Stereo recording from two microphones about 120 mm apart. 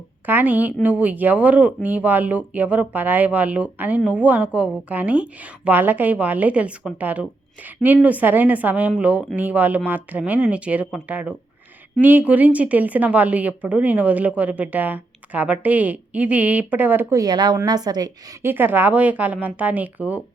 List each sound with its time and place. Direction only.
0.3 s speech: 15° right (ahead or behind)
17.2 s a woman's voice: 35° right (ahead or behind)
18.4 s speech: 15° right (ahead or behind)